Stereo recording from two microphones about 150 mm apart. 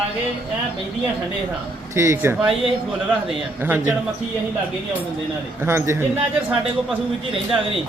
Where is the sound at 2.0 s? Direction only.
20° right (ahead or behind).